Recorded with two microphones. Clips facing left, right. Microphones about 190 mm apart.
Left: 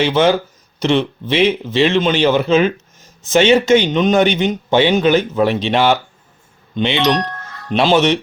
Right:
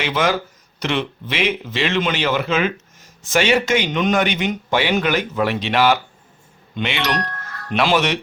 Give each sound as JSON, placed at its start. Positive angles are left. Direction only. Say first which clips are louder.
{"t": 0.0, "sound": "speech", "louder": "left 6 dB", "side_deg": 30}